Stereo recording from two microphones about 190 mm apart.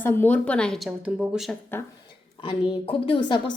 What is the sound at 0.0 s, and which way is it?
A woman's voice, 10° left (ahead or behind).